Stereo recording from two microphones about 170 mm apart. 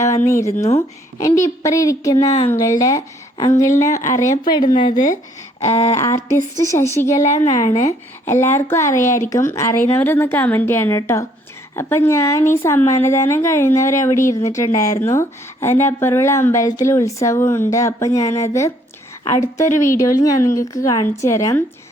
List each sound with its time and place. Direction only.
0.0 s speech: 15° left (ahead or behind)
0.5 s speech: 40° left (ahead or behind)
1.2 s a woman's voice: 20° left (ahead or behind)
4.9 s speech: 50° left (ahead or behind)
5.7 s speech: 35° left (ahead or behind)
6.0 s a woman's voice: 15° left (ahead or behind)
7.2 s speech: 45° left (ahead or behind)
8.2 s a woman's voice: 15° left (ahead or behind)